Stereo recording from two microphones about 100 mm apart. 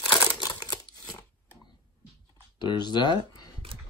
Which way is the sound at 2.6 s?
50° left (ahead or behind).